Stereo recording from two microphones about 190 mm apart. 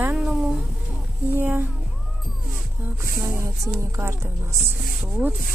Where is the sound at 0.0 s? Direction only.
5° right (ahead or behind).